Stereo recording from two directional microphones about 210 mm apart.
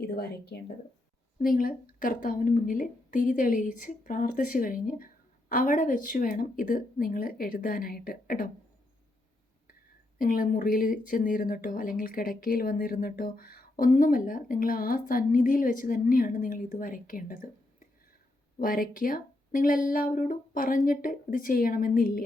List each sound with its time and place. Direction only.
0.1 s speech: 50° left (ahead or behind)
10.2 s speech: 40° left (ahead or behind)